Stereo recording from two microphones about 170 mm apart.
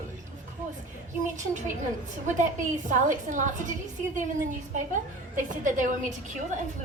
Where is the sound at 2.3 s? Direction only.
50° right (ahead or behind).